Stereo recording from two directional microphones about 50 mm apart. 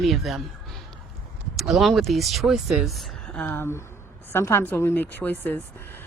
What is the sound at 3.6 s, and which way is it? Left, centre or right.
A woman's voice, left.